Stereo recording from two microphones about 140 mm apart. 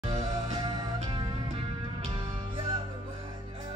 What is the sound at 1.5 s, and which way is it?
Music, 40° right (ahead or behind).